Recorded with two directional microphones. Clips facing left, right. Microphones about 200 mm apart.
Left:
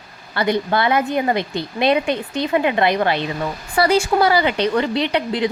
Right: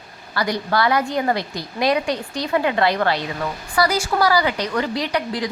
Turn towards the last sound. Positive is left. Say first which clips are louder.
# left 3 dB
turn(degrees=25)  # may be behind; listen again after turning